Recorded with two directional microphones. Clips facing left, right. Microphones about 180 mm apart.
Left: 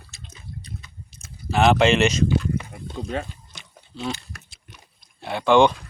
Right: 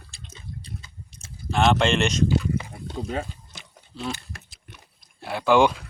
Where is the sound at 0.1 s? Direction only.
30° right (ahead or behind).